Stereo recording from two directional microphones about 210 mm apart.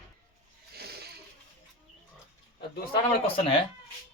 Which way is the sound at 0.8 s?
50° right (ahead or behind).